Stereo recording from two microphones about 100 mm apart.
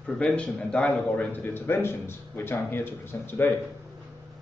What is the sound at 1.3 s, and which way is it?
Speech, 20° left (ahead or behind).